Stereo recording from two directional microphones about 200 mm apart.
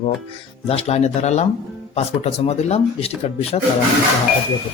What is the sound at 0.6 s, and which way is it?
A man's voice, 30° left (ahead or behind).